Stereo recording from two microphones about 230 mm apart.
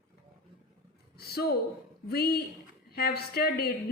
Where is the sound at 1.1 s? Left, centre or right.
Left.